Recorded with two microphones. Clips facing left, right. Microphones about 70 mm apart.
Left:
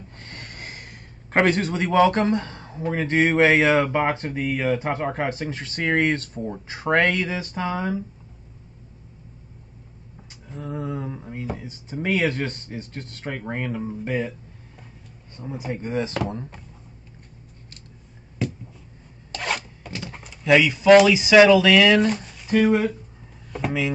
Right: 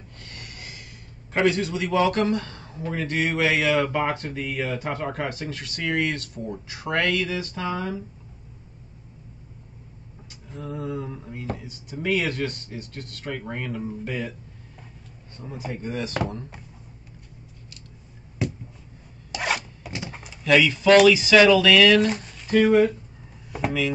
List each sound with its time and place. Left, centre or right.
0.2 s speech: left
10.5 s speech: left
15.3 s speech: left
19.3 s zipper: centre
20.4 s speech: centre
22.0 s speech: centre
23.5 s a sound: centre